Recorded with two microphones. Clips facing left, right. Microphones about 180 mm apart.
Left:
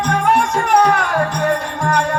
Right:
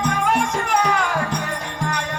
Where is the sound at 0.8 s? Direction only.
60° left (ahead or behind).